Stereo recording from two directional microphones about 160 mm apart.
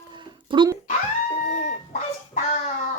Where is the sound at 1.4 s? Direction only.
50° left (ahead or behind).